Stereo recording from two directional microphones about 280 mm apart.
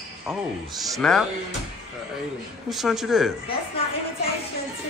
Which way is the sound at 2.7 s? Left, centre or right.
Centre.